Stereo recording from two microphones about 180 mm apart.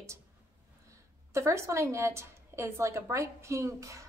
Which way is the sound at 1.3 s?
15° right (ahead or behind).